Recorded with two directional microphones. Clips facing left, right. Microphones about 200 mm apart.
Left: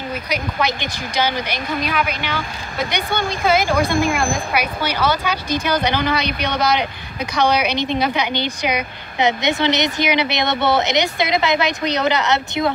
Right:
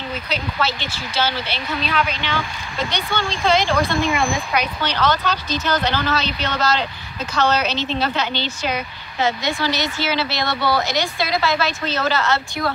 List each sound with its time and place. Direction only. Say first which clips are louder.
0.3 s a woman's voice: left 2 dB; 15° left (ahead or behind)